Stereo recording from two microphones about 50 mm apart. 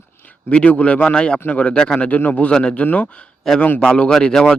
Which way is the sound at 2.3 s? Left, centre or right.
Left.